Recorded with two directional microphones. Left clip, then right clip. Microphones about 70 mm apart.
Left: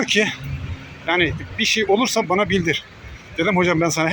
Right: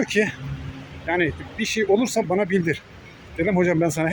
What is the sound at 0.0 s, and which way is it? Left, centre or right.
Speech, right.